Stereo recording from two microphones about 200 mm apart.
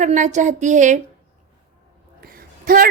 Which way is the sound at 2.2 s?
45° right (ahead or behind).